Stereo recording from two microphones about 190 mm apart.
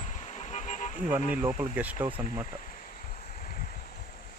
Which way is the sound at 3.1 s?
45° left (ahead or behind).